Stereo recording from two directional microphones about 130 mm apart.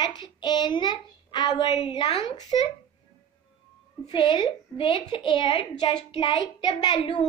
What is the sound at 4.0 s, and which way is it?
A child's voice, 40° left (ahead or behind).